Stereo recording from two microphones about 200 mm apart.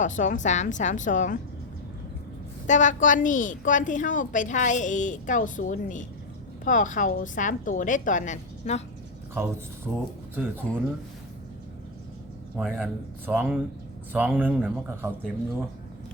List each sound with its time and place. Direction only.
0.0 s a woman's voice: 40° left (ahead or behind)
2.6 s a woman's voice: 40° left (ahead or behind)
9.3 s speech: 10° right (ahead or behind)
10.6 s speech: 5° left (ahead or behind)
12.5 s speech: 10° right (ahead or behind)